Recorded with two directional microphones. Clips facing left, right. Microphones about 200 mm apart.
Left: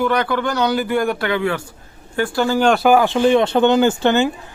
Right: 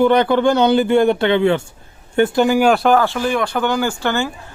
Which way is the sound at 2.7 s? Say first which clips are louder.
Even; centre (ahead or behind).